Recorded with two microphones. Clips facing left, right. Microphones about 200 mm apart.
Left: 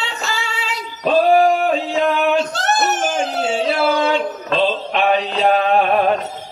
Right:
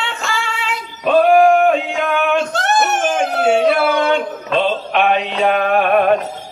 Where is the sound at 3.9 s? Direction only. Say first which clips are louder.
Right 1 dB; 30° left (ahead or behind).